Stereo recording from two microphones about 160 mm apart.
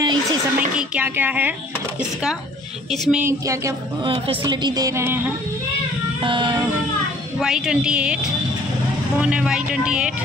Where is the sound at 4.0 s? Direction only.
30° right (ahead or behind); by 5.3 s 15° right (ahead or behind).